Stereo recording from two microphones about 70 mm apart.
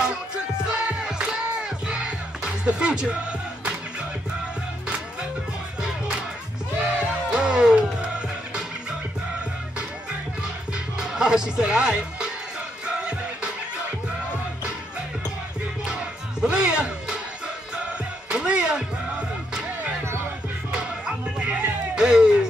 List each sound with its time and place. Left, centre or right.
0.0 s music: centre
6.8 s music: centre
10.4 s music: centre
15.8 s music: centre
18.3 s music: centre